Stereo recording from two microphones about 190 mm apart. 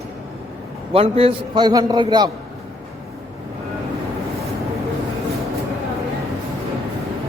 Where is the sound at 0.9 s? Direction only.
30° right (ahead or behind).